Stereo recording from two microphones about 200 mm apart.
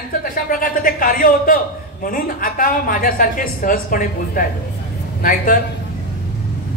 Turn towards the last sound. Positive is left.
turn(degrees=45)  # may be behind; listen again after turning